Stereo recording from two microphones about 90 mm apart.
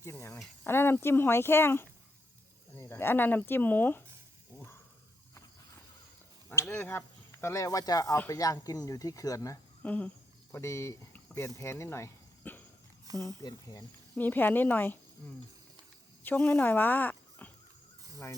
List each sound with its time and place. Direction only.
0.0 s a sound: 30° left (ahead or behind)
0.7 s speech: 25° left (ahead or behind)
6.7 s speech: 25° left (ahead or behind)
9.8 s a sound: 15° left (ahead or behind)
10.5 s speech: 35° left (ahead or behind)
12.4 s cough: 20° left (ahead or behind)
13.1 s speech: 45° right (ahead or behind)
13.4 s speech: 45° left (ahead or behind)
14.2 s speech: 20° left (ahead or behind)
16.2 s speech: 15° left (ahead or behind)